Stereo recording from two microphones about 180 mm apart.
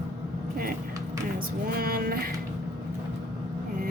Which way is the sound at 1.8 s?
55° right (ahead or behind).